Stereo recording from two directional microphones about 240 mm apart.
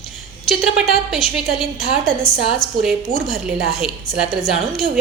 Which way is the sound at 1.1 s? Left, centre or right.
Centre.